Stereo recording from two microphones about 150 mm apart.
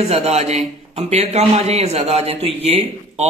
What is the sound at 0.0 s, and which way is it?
Speech, 45° right (ahead or behind).